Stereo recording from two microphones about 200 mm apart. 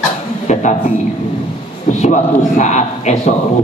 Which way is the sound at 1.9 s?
35° left (ahead or behind).